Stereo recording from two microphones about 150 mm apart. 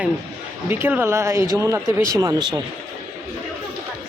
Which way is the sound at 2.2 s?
30° right (ahead or behind).